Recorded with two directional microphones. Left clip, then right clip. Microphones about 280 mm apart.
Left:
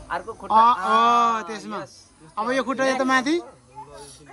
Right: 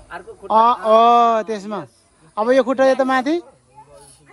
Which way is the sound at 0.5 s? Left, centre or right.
Centre.